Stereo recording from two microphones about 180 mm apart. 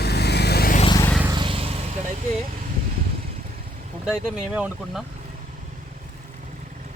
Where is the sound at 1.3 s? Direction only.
25° right (ahead or behind).